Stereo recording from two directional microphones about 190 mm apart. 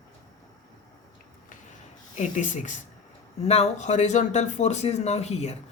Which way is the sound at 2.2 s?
40° left (ahead or behind).